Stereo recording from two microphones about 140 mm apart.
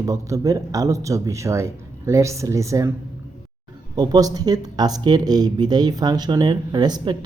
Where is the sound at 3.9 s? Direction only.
30° right (ahead or behind).